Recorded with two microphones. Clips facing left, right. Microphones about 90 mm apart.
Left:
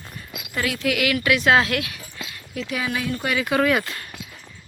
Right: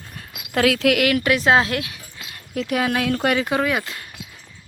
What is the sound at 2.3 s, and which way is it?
Speech, 50° right (ahead or behind).